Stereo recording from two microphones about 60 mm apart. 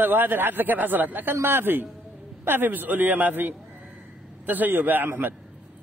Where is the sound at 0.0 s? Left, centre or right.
Right.